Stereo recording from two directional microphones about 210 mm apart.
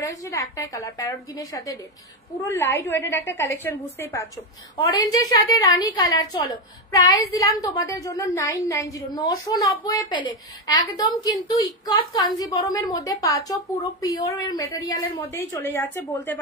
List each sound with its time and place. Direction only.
0.0 s a woman's voice: 15° left (ahead or behind)